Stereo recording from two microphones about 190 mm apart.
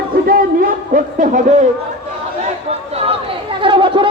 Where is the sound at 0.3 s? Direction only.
45° right (ahead or behind).